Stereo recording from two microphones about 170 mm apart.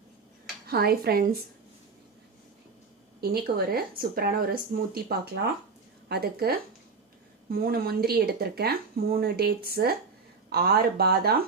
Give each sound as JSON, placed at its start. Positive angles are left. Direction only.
{"t": 0.7, "sound": "speech", "side_deg": -65}
{"t": 3.2, "sound": "speech", "side_deg": -65}